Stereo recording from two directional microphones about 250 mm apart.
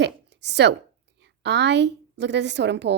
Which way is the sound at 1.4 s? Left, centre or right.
Right.